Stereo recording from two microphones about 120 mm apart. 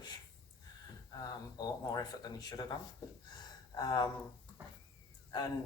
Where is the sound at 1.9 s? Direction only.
35° left (ahead or behind).